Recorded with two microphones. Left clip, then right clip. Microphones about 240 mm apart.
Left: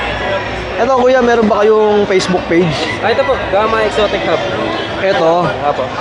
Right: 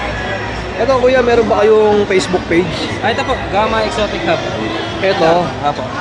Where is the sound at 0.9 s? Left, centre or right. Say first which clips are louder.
Left 1 dB; centre.